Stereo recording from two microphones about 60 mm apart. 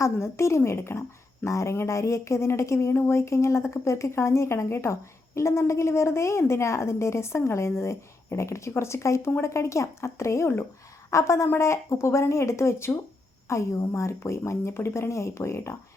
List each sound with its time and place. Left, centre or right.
0.0 s a woman's voice: left
11.4 s speech: left